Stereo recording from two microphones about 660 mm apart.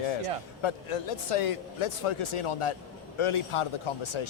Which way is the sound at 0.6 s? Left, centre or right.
Left.